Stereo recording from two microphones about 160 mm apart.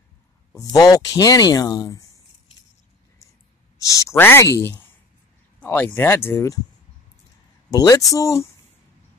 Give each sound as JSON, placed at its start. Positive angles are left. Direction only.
{"t": 0.6, "sound": "speech", "side_deg": 25}
{"t": 3.8, "sound": "speech", "side_deg": 20}
{"t": 7.7, "sound": "speech", "side_deg": 25}